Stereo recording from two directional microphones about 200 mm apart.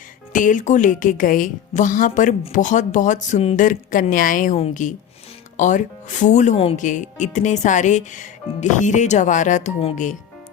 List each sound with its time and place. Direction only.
0.3 s a woman's voice: 40° left (ahead or behind)